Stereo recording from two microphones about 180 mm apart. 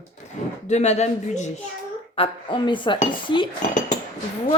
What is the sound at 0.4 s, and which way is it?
A woman's voice, 40° left (ahead or behind).